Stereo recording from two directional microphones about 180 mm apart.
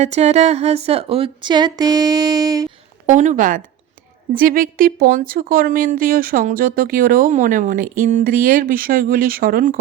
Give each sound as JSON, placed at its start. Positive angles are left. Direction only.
{"t": 0.0, "sound": "speech", "side_deg": -40}
{"t": 3.1, "sound": "speech", "side_deg": -45}